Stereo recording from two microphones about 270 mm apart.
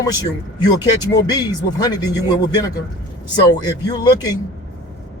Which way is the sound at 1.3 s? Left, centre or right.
Centre.